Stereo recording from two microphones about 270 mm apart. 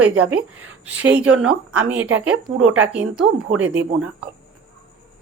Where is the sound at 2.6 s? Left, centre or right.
Right.